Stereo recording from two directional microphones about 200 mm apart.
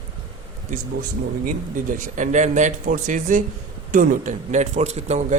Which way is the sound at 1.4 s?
40° right (ahead or behind).